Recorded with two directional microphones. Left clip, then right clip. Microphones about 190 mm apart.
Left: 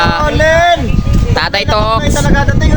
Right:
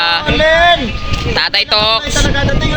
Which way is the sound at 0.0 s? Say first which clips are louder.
Left 1 dB; 10° left (ahead or behind).